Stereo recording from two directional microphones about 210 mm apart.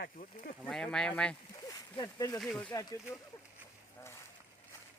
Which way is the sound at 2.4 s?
5° left (ahead or behind).